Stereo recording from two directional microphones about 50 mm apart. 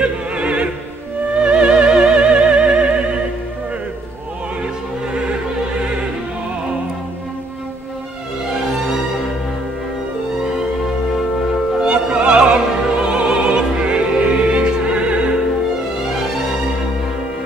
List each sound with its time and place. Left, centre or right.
0.0 s opera: right
1.4 s music: right
11.8 s music: right
13.0 s opera: centre